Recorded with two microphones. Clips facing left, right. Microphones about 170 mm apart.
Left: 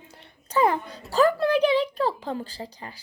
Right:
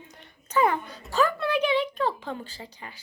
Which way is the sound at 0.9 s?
35° left (ahead or behind).